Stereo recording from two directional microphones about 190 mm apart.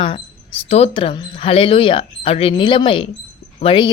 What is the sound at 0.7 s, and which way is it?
A woman's voice, 30° left (ahead or behind).